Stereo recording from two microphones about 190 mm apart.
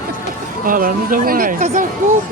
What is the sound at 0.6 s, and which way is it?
Speech, 45° right (ahead or behind).